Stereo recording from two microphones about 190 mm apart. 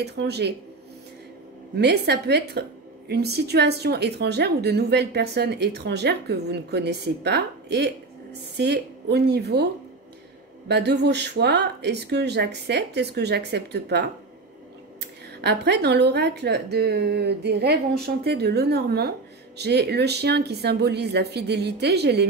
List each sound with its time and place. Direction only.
0.0 s a woman's voice: 60° right (ahead or behind)
1.8 s a woman's voice: 60° right (ahead or behind)
10.7 s a woman's voice: 60° right (ahead or behind)
15.4 s a woman's voice: 60° right (ahead or behind)